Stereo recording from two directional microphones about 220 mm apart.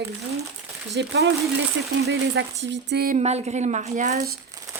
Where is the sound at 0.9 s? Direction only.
50° right (ahead or behind).